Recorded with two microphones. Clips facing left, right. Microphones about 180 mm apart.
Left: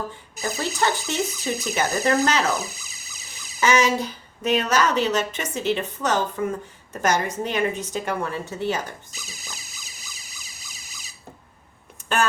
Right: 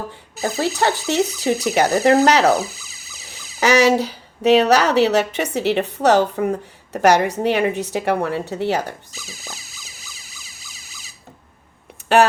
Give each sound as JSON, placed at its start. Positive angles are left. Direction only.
{"t": 0.6, "sound": "a woman's voice", "side_deg": -65}
{"t": 3.6, "sound": "a woman's voice", "side_deg": -70}
{"t": 12.0, "sound": "speech", "side_deg": -65}